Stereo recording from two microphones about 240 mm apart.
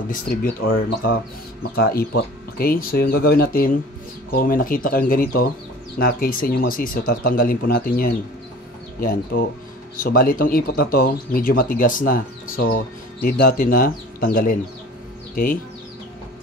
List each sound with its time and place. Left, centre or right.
0.1 s speech: left